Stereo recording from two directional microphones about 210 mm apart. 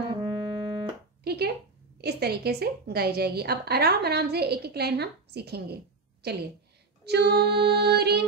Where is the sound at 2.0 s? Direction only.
50° right (ahead or behind).